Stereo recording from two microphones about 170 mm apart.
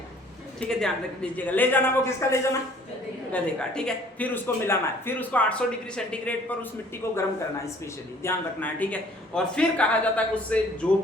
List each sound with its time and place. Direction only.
0.6 s a man's voice: 5° left (ahead or behind)
3.3 s a man's voice: 5° left (ahead or behind)
8.2 s a man's voice: 10° left (ahead or behind)